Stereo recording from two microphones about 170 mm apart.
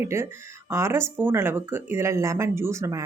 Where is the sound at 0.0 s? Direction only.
15° right (ahead or behind).